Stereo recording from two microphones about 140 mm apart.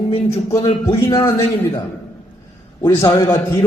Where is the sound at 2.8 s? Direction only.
25° left (ahead or behind).